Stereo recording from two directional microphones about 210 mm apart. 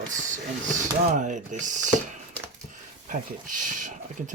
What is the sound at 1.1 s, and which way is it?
Speech, 35° right (ahead or behind).